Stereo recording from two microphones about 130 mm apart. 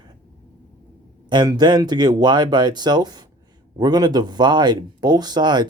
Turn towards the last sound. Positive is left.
turn(degrees=-35)  # may be behind; listen again after turning